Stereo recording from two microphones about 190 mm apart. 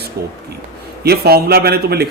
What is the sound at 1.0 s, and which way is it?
Speech, 55° right (ahead or behind).